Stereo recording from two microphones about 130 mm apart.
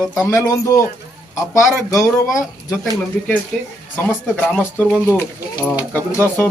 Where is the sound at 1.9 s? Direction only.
25° left (ahead or behind).